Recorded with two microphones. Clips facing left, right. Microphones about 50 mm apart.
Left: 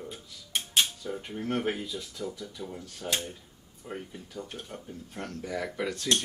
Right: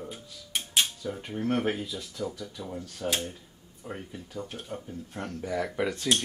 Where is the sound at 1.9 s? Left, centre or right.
Centre.